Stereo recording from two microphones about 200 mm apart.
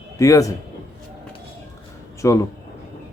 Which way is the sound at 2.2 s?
15° left (ahead or behind).